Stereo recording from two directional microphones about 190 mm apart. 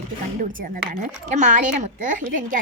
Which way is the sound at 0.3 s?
45° right (ahead or behind).